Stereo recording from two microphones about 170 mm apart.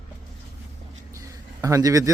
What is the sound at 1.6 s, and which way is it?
Speech, 20° right (ahead or behind).